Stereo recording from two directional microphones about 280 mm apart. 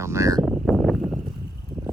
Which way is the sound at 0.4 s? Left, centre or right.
Centre.